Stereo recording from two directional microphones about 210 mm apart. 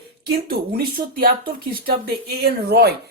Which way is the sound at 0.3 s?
45° right (ahead or behind).